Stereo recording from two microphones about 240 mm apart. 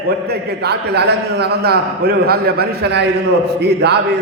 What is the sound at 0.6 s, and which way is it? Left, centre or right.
A man's voice, right.